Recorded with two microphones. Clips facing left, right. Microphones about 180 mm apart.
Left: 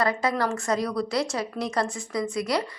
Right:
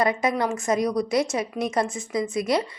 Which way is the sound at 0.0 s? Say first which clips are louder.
Right 2 dB; 20° right (ahead or behind).